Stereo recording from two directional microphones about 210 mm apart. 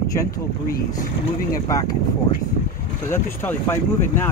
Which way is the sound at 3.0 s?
10° left (ahead or behind).